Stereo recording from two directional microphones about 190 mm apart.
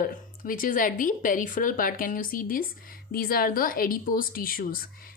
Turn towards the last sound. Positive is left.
turn(degrees=50)  # may be behind; listen again after turning